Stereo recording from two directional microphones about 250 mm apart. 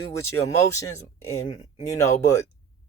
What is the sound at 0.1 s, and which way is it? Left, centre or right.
Speech, centre.